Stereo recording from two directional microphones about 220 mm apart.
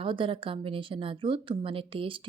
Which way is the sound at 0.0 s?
25° right (ahead or behind).